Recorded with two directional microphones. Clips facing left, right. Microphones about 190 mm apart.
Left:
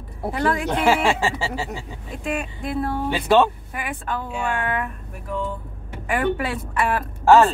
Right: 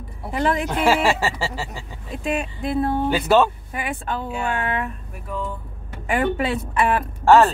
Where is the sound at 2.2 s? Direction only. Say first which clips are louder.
Right 3 dB; 25° right (ahead or behind).